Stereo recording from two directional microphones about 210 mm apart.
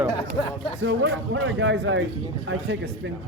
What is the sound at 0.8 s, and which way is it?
Speech, 60° right (ahead or behind).